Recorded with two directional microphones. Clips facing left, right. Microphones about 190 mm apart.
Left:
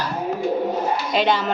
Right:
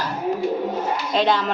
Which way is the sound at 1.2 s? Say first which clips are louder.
Right 1 dB; centre (ahead or behind).